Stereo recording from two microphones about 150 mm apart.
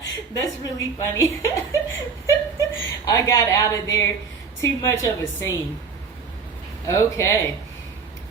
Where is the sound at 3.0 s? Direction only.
20° left (ahead or behind).